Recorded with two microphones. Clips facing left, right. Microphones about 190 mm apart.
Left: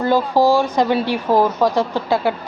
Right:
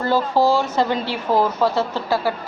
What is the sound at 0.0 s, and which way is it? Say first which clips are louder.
Speech: left 3 dB; 15° left (ahead or behind).